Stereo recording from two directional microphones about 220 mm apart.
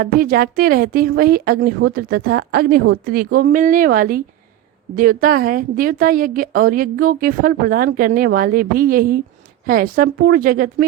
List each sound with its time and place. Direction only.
0.0 s a woman's voice: 40° right (ahead or behind)